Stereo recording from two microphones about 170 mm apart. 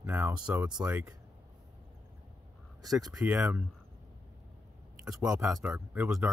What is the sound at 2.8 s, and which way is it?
Speech, 20° right (ahead or behind).